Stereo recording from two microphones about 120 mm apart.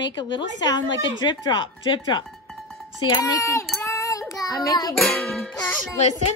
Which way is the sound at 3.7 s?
25° left (ahead or behind).